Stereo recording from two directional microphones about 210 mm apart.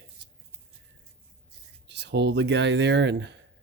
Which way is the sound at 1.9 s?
55° right (ahead or behind).